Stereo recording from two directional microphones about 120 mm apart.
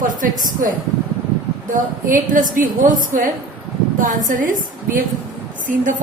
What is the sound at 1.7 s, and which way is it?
A woman's voice, 90° right.